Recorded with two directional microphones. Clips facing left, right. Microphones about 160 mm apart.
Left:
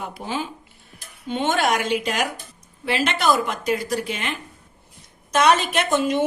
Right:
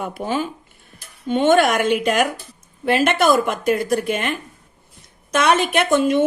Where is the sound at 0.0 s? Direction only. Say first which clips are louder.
Right 5 dB; 55° right (ahead or behind).